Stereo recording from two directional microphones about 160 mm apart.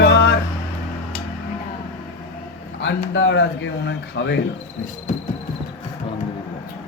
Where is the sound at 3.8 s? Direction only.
90° left.